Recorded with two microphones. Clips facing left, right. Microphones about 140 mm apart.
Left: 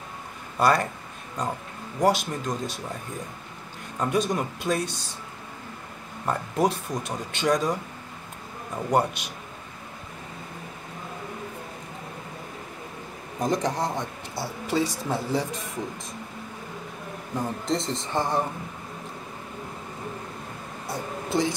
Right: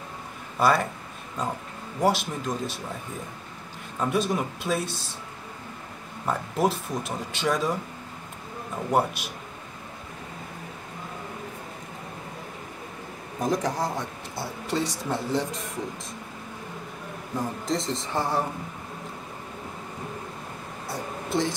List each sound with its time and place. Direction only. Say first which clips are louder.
0.6 s speech: even; centre (ahead or behind)
4.0 s speech: even; centre (ahead or behind)
6.2 s speech: left 1 dB; centre (ahead or behind)
8.9 s speech: left 1 dB; 5° right (ahead or behind)
13.4 s speech: left 1 dB; centre (ahead or behind)
17.4 s speech: left 1 dB; centre (ahead or behind)
20.9 s a sound: left 1 dB; centre (ahead or behind)